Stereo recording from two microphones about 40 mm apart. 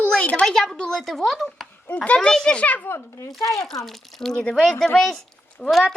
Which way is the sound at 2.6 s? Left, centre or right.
Left.